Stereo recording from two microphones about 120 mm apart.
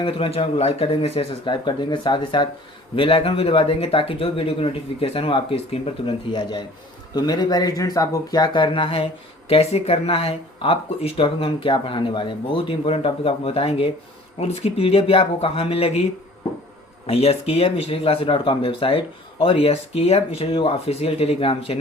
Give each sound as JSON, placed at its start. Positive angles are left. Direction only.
{"t": 0.0, "sound": "speech", "side_deg": 55}
{"t": 1.6, "sound": "speech", "side_deg": 40}
{"t": 2.9, "sound": "speech", "side_deg": 50}
{"t": 7.1, "sound": "speech", "side_deg": 35}
{"t": 17.1, "sound": "speech", "side_deg": 55}